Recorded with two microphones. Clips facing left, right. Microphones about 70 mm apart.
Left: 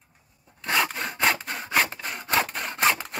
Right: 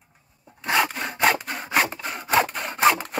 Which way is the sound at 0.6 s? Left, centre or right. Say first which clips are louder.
Right 3 dB; centre.